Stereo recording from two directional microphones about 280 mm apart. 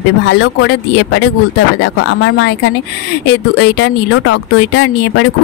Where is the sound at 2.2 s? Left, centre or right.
Left.